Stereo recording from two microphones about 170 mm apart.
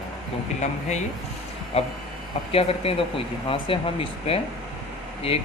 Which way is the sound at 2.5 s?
35° left (ahead or behind).